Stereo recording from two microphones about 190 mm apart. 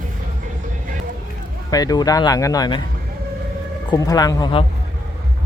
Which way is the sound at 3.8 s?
20° left (ahead or behind).